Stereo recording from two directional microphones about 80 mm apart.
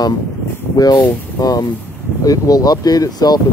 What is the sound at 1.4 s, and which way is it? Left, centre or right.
Speech, left.